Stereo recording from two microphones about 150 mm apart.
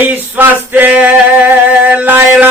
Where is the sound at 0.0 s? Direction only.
10° right (ahead or behind).